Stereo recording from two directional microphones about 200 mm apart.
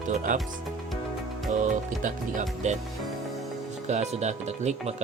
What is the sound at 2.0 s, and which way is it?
Speech, 40° right (ahead or behind).